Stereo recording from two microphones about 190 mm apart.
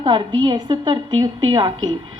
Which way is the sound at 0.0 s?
25° right (ahead or behind).